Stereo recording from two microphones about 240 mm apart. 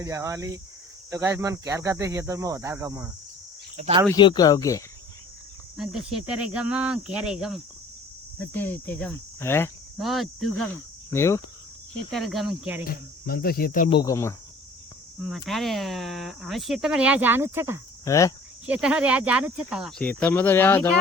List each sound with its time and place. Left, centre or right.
0.0 s speech: centre
3.8 s speech: right
4.1 s speech: centre
5.7 s speech: centre
10.0 s speech: centre
11.1 s speech: centre
12.1 s speech: centre
12.8 s speech: left
13.9 s speech: centre
15.4 s speech: centre
18.0 s speech: centre
18.6 s speech: centre